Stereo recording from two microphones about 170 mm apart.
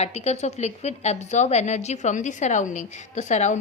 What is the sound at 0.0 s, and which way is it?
A woman's voice, 40° left (ahead or behind).